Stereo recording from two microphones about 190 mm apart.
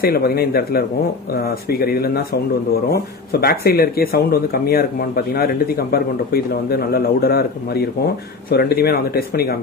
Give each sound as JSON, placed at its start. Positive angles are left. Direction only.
{"t": 0.0, "sound": "speech", "side_deg": 55}
{"t": 3.3, "sound": "speech", "side_deg": 55}